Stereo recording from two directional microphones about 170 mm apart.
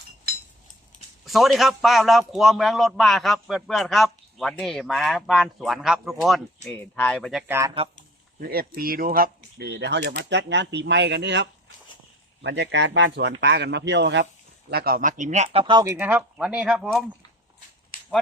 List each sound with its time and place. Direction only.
1.2 s a man's voice: centre (ahead or behind)
8.4 s a man's voice: 60° right (ahead or behind); by 14.3 s 90° right
14.7 s speech: 65° right (ahead or behind); by 15.6 s 45° right (ahead or behind)
15.6 s speech: 25° right (ahead or behind)
15.9 s speech: 10° right (ahead or behind)
17.9 s a sound: 50° left (ahead or behind)